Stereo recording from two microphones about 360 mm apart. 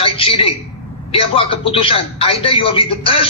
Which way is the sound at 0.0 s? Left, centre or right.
Centre.